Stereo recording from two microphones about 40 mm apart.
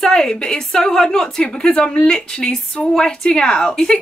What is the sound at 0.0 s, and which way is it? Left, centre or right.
A woman's voice, centre.